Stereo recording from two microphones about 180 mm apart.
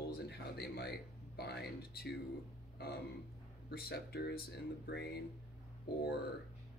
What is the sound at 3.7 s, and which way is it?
Speech, 60° left (ahead or behind).